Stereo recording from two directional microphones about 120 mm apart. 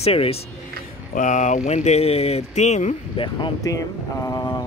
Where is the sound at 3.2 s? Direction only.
50° left (ahead or behind).